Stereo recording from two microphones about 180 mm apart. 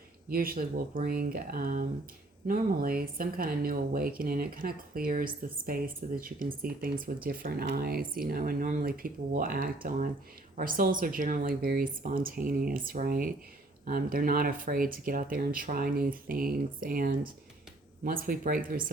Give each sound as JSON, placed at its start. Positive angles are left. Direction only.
{"t": 0.3, "sound": "speech", "side_deg": -55}